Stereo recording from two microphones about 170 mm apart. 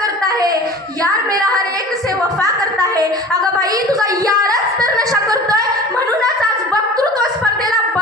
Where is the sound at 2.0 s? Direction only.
20° right (ahead or behind).